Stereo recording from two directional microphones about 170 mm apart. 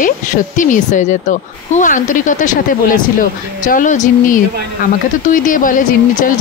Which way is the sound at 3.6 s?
50° left (ahead or behind).